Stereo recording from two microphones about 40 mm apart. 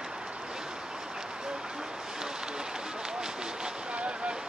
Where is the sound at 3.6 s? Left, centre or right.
Right.